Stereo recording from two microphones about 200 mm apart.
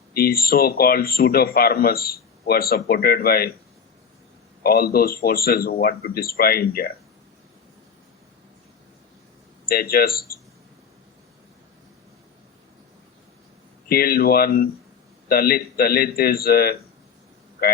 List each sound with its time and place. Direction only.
0.1 s speech: 50° left (ahead or behind)
4.6 s speech: 50° left (ahead or behind)
9.6 s speech: 50° left (ahead or behind)
13.8 s speech: 50° left (ahead or behind)